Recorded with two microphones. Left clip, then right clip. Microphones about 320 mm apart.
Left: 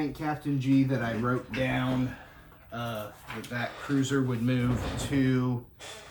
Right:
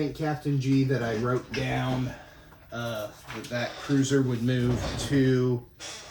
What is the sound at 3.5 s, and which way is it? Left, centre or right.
Speech, centre.